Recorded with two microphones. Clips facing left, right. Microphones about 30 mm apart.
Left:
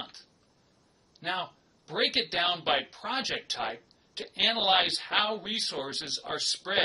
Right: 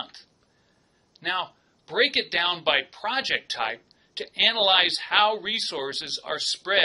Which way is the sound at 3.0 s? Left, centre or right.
Right.